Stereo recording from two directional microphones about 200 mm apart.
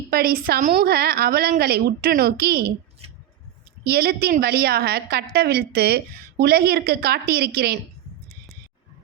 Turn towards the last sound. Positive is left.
turn(degrees=-50)  # may be behind; listen again after turning